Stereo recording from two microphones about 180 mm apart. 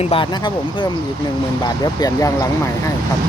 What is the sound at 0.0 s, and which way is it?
Speech, 30° left (ahead or behind).